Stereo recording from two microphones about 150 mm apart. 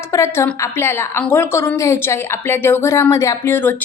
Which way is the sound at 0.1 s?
20° left (ahead or behind).